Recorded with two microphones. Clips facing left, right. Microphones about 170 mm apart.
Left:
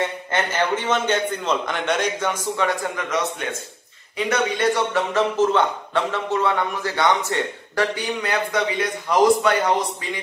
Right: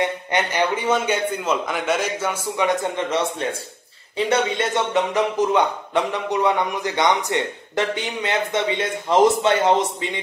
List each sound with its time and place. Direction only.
0.0 s a man's voice: 15° right (ahead or behind)
2.6 s a man's voice: 20° right (ahead or behind)